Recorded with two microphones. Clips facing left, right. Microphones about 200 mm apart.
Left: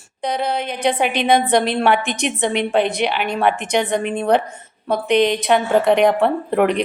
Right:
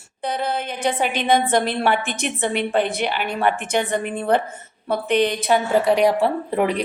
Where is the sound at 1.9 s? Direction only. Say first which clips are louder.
Left 3 dB; 15° left (ahead or behind).